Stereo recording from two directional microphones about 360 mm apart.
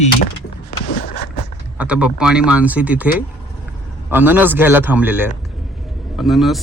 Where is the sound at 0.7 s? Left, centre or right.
Left.